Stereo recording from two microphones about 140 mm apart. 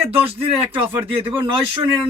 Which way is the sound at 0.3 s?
40° right (ahead or behind).